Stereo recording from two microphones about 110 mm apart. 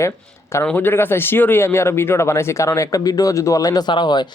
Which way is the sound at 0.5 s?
15° left (ahead or behind).